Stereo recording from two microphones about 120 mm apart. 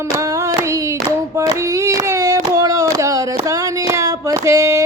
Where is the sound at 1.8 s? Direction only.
25° right (ahead or behind).